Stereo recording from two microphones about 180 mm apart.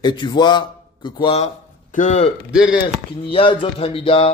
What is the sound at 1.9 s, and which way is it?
A man's voice, 45° left (ahead or behind).